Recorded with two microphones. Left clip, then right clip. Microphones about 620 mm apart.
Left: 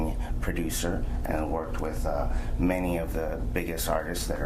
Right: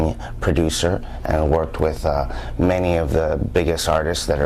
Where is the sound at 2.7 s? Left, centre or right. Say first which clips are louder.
Right 12 dB; right.